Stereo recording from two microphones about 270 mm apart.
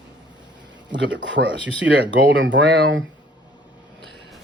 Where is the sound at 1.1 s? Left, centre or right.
Right.